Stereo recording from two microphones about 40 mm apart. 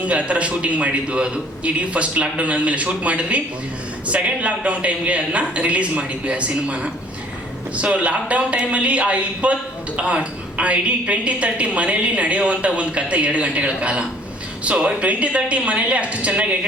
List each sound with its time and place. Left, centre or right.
0.0 s a woman's voice: right